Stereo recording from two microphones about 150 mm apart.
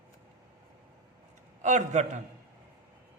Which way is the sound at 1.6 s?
50° right (ahead or behind).